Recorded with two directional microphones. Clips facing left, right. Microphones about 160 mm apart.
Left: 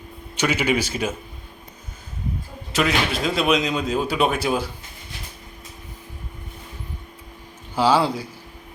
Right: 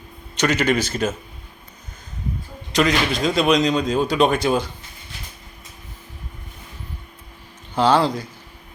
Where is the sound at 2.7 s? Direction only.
5° left (ahead or behind).